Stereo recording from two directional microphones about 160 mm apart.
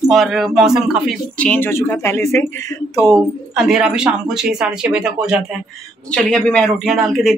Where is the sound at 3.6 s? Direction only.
5° right (ahead or behind).